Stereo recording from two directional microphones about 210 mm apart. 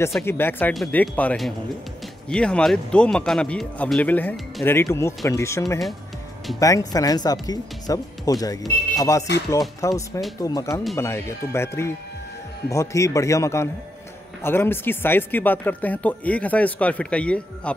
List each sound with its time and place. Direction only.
0.2 s speech: 10° left (ahead or behind)